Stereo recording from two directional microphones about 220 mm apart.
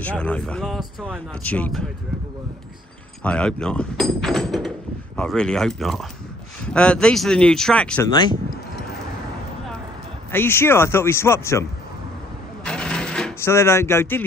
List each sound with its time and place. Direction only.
0.0 s speech: 5° left (ahead or behind)
1.4 s speech: 5° left (ahead or behind)
3.3 s speech: 5° left (ahead or behind)
8.1 s speech: 20° left (ahead or behind)
10.3 s speech: 10° left (ahead or behind)
12.6 s a sound: 5° left (ahead or behind)